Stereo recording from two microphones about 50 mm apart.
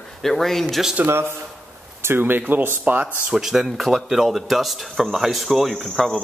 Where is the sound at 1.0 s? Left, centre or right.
Right.